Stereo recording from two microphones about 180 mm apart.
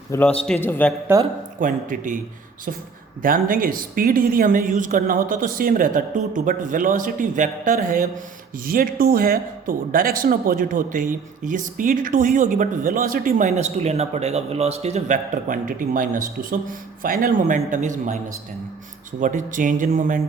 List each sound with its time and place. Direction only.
0.1 s a man's voice: 10° left (ahead or behind)
1.5 s speech: 45° right (ahead or behind)
3.2 s speech: 50° right (ahead or behind)
19.2 s speech: 45° right (ahead or behind)